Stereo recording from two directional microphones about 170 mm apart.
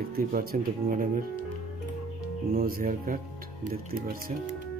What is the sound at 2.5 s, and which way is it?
Speech, 60° right (ahead or behind).